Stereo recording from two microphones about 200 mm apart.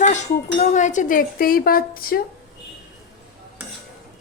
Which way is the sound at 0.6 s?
35° left (ahead or behind).